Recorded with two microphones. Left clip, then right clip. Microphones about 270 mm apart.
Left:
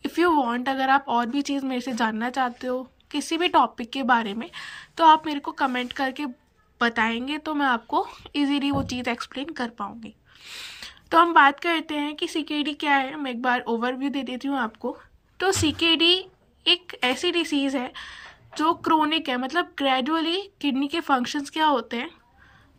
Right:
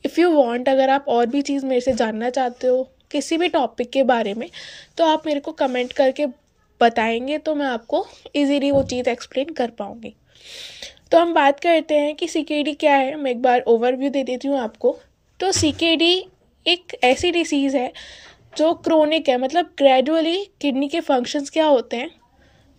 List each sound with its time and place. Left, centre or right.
0.0 s speech: centre
15.9 s speech: centre